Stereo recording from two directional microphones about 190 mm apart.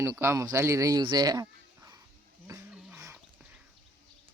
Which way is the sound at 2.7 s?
10° right (ahead or behind).